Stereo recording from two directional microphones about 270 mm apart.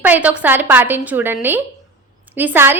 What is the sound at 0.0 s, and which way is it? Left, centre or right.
A woman's voice, centre.